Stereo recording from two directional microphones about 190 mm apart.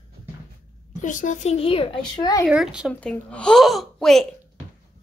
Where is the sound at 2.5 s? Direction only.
5° right (ahead or behind).